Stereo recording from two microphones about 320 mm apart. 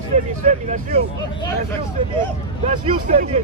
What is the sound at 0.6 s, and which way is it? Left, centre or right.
Speech, right.